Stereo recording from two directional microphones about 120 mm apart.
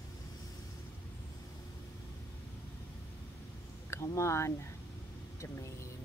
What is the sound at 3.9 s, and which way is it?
Speech, 25° left (ahead or behind).